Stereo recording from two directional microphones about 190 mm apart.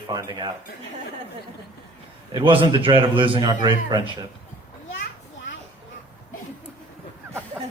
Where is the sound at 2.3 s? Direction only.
25° right (ahead or behind).